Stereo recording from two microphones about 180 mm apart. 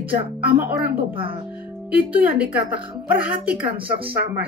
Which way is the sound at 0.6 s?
55° right (ahead or behind).